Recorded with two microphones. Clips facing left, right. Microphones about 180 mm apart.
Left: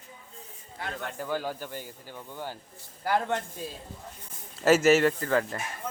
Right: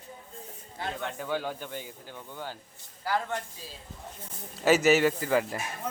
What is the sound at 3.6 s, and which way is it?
Speech, 55° left (ahead or behind).